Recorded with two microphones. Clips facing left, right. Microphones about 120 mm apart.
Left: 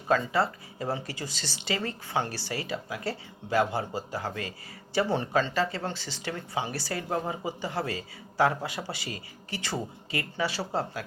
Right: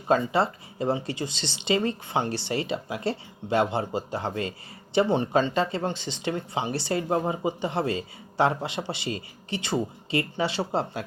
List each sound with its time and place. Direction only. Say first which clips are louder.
0.1 s speech: right 3 dB; 25° right (ahead or behind)